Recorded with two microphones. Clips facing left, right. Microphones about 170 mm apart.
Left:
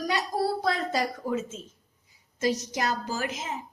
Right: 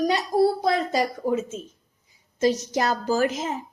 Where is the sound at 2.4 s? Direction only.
30° right (ahead or behind).